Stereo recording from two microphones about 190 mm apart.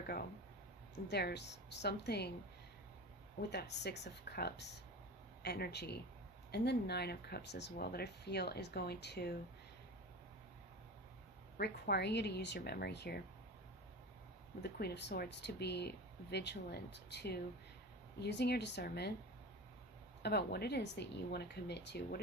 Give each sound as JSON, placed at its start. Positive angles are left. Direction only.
{"t": 1.0, "sound": "speech", "side_deg": 60}
{"t": 3.5, "sound": "speech", "side_deg": 60}
{"t": 11.5, "sound": "speech", "side_deg": 60}
{"t": 14.6, "sound": "speech", "side_deg": 60}
{"t": 20.2, "sound": "speech", "side_deg": 60}